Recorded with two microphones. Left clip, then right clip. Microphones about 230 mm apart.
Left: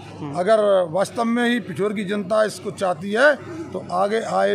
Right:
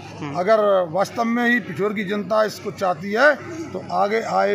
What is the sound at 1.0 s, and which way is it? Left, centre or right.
Speech, centre.